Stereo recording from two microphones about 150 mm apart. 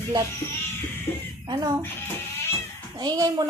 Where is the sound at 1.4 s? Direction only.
25° right (ahead or behind).